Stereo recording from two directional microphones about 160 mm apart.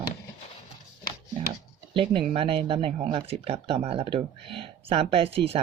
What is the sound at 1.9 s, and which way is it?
Speech, 35° right (ahead or behind).